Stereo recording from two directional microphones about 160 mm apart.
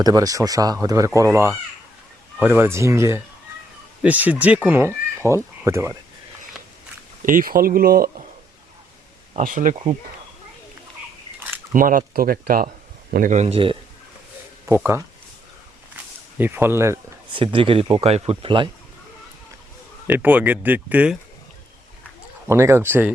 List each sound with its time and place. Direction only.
0.0 s speech: 20° right (ahead or behind)
7.2 s speech: 55° right (ahead or behind)
9.4 s speech: 55° right (ahead or behind)
11.7 s speech: 55° right (ahead or behind)
13.1 s a man's voice: 50° right (ahead or behind); by 13.7 s 35° right (ahead or behind)
14.7 s speech: 15° right (ahead or behind)
16.0 s a sound: 10° right (ahead or behind)
17.3 s speech: 35° right (ahead or behind)
20.1 s speech: 10° right (ahead or behind)
22.4 s speech: 15° right (ahead or behind)